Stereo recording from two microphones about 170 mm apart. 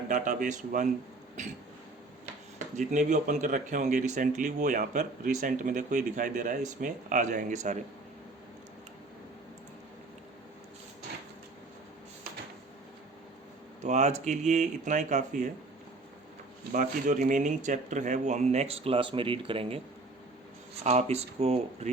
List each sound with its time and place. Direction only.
0.1 s speech: 50° right (ahead or behind)
2.7 s speech: 45° right (ahead or behind)
13.8 s speech: 45° right (ahead or behind)
16.7 s speech: 50° right (ahead or behind); by 19.8 s 30° right (ahead or behind)
20.8 s speech: 40° right (ahead or behind)